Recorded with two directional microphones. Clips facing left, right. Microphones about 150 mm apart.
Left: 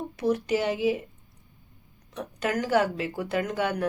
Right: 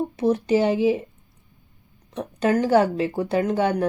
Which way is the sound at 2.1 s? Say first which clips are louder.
Right 7 dB; 30° right (ahead or behind).